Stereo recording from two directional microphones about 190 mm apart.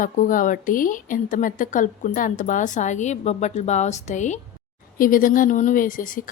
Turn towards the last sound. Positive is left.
turn(degrees=45)  # may be behind; listen again after turning